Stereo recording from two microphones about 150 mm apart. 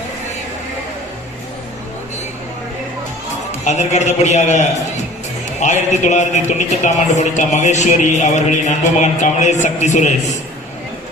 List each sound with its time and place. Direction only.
3.6 s a man's voice: 50° left (ahead or behind)